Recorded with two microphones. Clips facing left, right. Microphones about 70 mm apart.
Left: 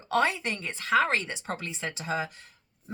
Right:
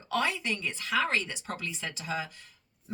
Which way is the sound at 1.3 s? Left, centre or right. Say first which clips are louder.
Left 2 dB; left.